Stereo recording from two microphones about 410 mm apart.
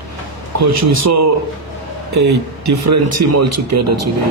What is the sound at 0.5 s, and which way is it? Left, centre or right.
Speech, right.